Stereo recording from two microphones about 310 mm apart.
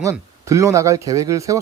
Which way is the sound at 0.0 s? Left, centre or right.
Centre.